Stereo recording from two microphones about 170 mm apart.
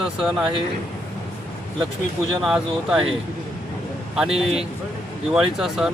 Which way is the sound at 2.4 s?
5° right (ahead or behind).